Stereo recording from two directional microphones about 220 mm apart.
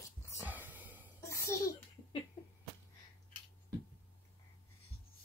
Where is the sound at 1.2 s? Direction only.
15° left (ahead or behind).